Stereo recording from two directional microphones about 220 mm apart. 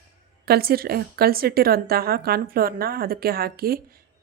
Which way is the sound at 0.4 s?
45° right (ahead or behind).